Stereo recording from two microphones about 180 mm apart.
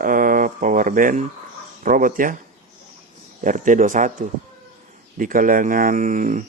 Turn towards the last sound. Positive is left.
turn(degrees=-45)  # may be behind; listen again after turning